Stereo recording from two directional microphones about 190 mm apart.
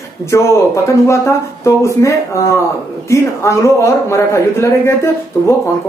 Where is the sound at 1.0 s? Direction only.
15° left (ahead or behind).